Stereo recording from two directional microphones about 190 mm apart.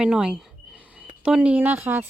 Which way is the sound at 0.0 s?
5° right (ahead or behind).